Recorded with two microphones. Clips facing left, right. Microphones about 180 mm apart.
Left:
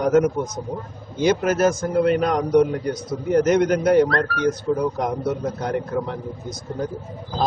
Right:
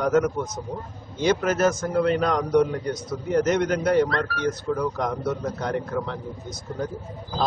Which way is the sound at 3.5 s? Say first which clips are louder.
Left 6 dB; 15° left (ahead or behind).